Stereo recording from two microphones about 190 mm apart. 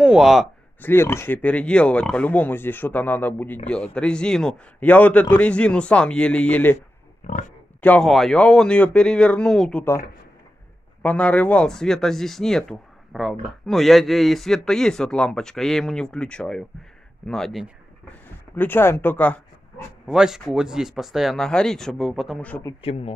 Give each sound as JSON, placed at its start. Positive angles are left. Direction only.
{"t": 0.0, "sound": "speech", "side_deg": -5}
{"t": 0.8, "sound": "speech", "side_deg": 15}
{"t": 7.2, "sound": "speech", "side_deg": 40}
{"t": 7.8, "sound": "speech", "side_deg": 5}
{"t": 18.6, "sound": "speech", "side_deg": 10}
{"t": 20.1, "sound": "speech", "side_deg": 0}
{"t": 22.8, "sound": "speech", "side_deg": 30}